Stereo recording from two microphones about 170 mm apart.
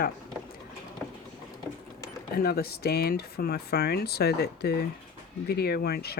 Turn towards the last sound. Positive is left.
turn(degrees=65)  # may be behind; listen again after turning